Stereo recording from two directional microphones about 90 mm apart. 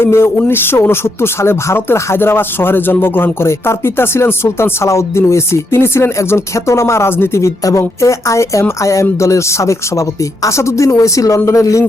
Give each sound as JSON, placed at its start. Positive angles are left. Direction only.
{"t": 0.0, "sound": "speech", "side_deg": 25}